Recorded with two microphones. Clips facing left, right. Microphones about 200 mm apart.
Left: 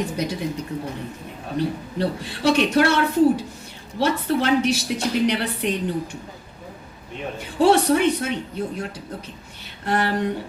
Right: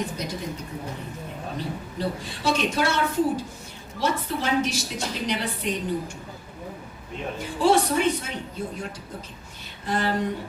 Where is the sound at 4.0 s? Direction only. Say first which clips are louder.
Left 6 dB; 65° left (ahead or behind).